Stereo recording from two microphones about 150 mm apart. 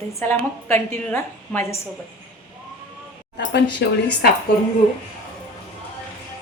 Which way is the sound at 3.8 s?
90° left.